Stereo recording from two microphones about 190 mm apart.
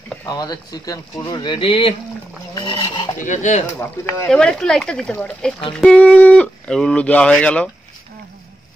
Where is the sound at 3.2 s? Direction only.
40° left (ahead or behind).